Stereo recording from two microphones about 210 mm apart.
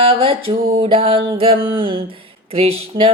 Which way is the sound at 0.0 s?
25° right (ahead or behind).